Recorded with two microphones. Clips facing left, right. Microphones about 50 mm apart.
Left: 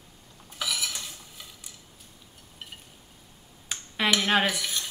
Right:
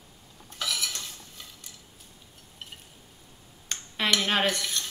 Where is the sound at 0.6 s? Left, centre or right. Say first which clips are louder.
Even; centre.